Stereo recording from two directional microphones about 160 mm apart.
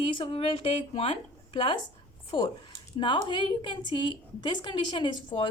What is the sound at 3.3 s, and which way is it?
A woman's voice, 30° left (ahead or behind).